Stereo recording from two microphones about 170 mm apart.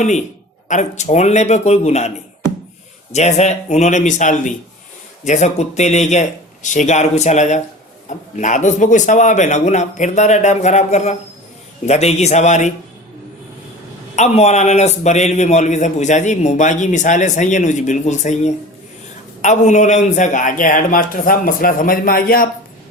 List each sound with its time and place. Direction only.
0.7 s a man's voice: 45° left (ahead or behind)
14.2 s a man's voice: 40° left (ahead or behind); by 22.4 s 55° left (ahead or behind)